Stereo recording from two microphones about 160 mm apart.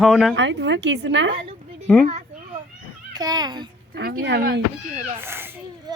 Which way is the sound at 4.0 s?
75° right (ahead or behind).